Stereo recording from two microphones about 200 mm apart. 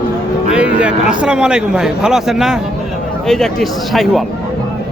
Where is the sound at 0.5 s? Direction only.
5° right (ahead or behind).